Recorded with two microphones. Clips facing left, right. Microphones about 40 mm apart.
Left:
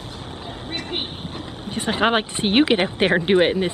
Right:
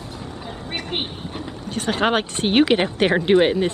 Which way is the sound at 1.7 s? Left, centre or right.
Centre.